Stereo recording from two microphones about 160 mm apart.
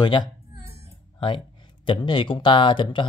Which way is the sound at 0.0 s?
25° left (ahead or behind).